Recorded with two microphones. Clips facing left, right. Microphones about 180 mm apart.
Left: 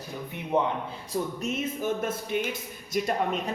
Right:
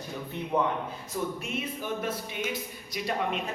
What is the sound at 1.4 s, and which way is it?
Speech, 45° left (ahead or behind).